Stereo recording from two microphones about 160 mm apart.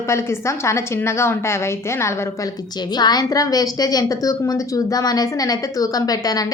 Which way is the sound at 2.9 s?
25° left (ahead or behind).